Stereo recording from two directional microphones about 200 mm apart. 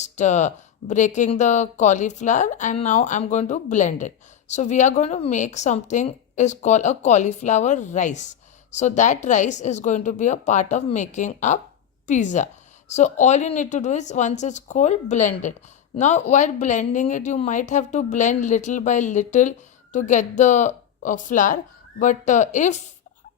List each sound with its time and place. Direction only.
0.0 s speech: 35° left (ahead or behind)